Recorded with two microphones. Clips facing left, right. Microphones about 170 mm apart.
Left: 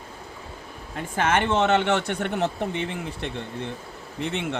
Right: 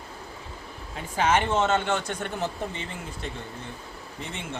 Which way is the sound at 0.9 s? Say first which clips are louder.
Left 1 dB; 50° left (ahead or behind).